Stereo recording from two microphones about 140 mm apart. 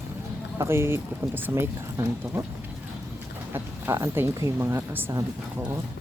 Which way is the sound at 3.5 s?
20° right (ahead or behind).